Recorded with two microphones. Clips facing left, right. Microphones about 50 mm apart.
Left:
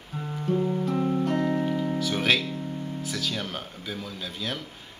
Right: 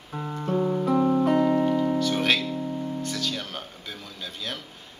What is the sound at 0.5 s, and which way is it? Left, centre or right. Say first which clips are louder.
Music: right 3 dB; right.